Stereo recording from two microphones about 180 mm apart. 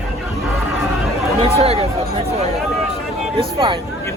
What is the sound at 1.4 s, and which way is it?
Speech, 35° right (ahead or behind).